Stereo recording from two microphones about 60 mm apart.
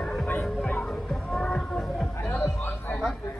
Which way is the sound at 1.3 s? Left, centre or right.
Centre.